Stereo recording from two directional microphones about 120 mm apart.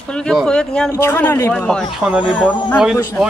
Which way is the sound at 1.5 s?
5° left (ahead or behind).